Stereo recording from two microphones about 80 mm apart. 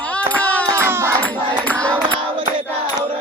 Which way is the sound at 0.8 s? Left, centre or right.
Right.